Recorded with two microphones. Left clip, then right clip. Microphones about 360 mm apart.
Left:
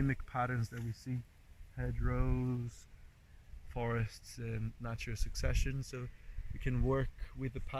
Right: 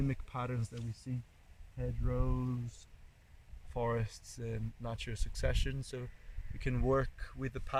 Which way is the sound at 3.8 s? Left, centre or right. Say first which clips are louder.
Right 3 dB; right.